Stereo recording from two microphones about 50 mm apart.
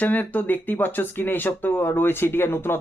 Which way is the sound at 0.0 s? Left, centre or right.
Left.